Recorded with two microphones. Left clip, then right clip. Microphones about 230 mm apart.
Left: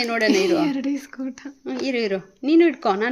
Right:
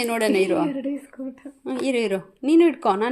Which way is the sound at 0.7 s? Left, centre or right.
Left.